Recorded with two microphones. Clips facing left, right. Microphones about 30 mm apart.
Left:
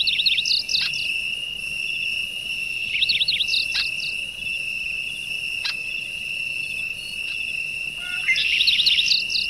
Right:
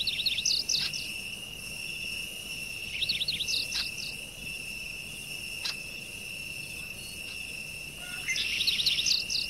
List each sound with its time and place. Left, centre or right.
0.0 s bird vocalization: left
2.9 s a sound: left
8.3 s chirp: left